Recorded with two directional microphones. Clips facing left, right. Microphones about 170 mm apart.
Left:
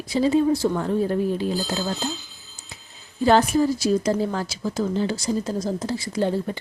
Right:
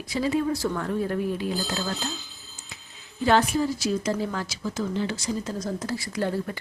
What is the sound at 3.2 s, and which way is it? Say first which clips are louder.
Speech: left 4 dB; 40° left (ahead or behind).